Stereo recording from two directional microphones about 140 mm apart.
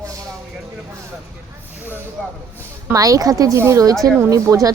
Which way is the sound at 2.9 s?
25° right (ahead or behind).